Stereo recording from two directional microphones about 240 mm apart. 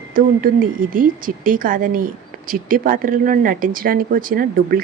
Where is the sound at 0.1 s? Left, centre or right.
Right.